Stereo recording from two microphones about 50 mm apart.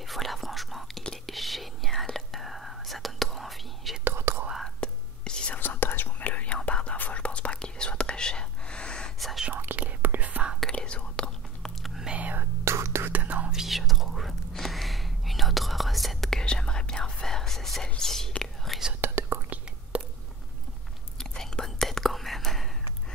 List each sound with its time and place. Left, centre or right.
0.0 s whispering: centre
4.0 s whispering: right
4.7 s whispering: centre
5.5 s whispering: left
6.1 s whispering: left
9.5 s whispering: right
10.7 s whispering: left
12.1 s whispering: right
12.6 s whispering: right
13.0 s whispering: right
13.5 s whispering: centre
18.9 s whispering: right
21.2 s whispering: centre